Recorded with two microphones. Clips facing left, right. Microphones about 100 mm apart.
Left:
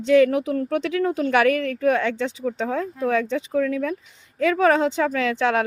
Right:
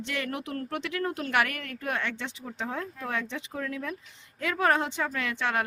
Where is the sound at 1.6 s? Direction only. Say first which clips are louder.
Left 12 dB; 90° left.